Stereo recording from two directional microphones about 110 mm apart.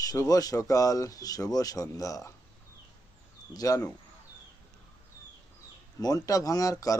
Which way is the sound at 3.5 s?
35° left (ahead or behind).